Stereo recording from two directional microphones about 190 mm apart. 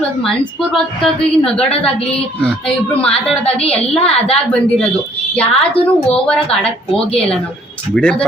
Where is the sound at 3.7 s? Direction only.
5° left (ahead or behind).